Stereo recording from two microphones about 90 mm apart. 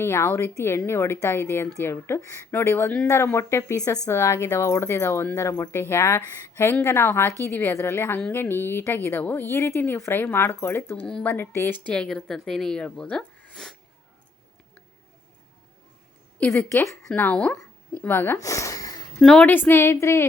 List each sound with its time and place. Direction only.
0.0 s speech: 25° left (ahead or behind)
4.0 s speech: 30° left (ahead or behind)
10.9 s speech: 10° left (ahead or behind)
11.3 s speech: 25° left (ahead or behind)
11.8 s speech: 10° left (ahead or behind)
16.5 s speech: 30° left (ahead or behind)
17.2 s speech: 15° left (ahead or behind)
18.3 s sniff: 35° left (ahead or behind)
19.2 s speech: 10° left (ahead or behind); by 20.2 s 30° left (ahead or behind)